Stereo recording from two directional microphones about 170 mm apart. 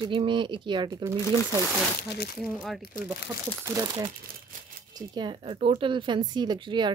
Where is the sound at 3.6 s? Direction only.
20° right (ahead or behind).